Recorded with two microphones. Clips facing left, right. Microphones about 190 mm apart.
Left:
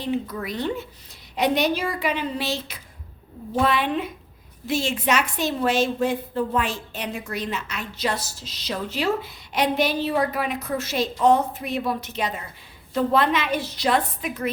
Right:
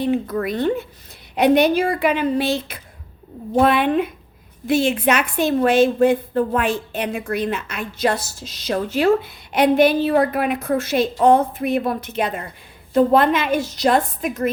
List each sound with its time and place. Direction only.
0.0 s a woman's voice: 55° right (ahead or behind)